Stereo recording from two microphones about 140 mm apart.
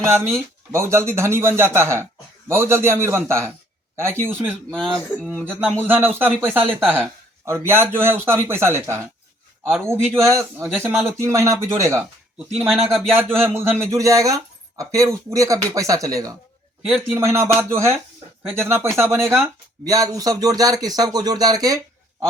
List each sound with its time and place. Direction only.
0.0 s speech: 20° right (ahead or behind)
4.7 s speech: 5° left (ahead or behind)
5.5 s a man's voice: 10° right (ahead or behind)
6.8 s speech: 5° left (ahead or behind)
7.4 s a man's voice: 20° right (ahead or behind)
12.5 s speech: centre (ahead or behind)
13.1 s a man's voice: 15° right (ahead or behind)